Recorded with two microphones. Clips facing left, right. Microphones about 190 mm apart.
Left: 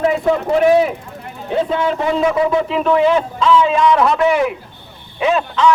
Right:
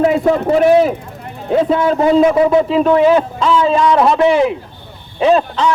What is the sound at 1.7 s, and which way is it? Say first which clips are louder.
A man's voice: right 8 dB; 40° right (ahead or behind).